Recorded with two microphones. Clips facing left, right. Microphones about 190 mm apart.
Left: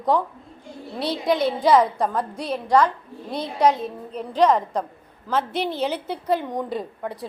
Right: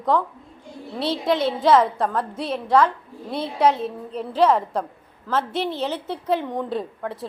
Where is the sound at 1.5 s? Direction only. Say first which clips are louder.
Right 1 dB; centre (ahead or behind).